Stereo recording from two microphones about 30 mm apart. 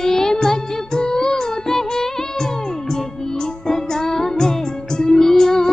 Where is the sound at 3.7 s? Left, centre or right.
Centre.